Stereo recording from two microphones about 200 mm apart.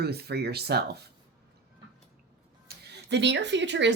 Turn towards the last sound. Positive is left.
turn(degrees=-60)  # may be behind; listen again after turning